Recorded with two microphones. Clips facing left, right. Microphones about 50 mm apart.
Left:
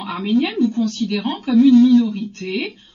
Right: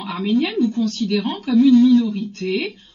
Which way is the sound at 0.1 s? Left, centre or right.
Left.